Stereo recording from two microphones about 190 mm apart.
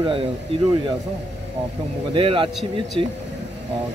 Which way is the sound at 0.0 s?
25° right (ahead or behind).